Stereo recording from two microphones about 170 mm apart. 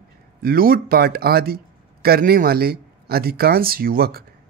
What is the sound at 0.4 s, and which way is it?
Speech, 60° right (ahead or behind).